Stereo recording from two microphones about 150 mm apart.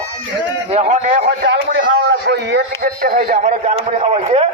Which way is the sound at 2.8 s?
75° right (ahead or behind).